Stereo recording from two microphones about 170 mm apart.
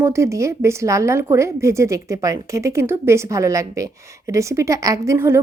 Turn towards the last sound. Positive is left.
turn(degrees=-15)  # may be behind; listen again after turning